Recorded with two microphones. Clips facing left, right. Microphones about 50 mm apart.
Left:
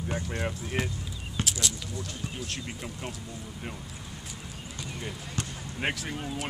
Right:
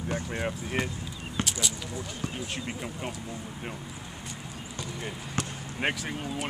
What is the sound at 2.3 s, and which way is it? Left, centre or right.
Speech, centre.